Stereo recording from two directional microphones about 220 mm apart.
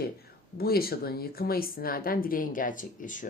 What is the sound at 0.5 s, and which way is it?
Speech, 45° left (ahead or behind).